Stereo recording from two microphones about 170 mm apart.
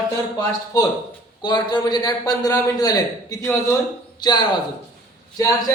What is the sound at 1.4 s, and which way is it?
A man's voice, 25° left (ahead or behind).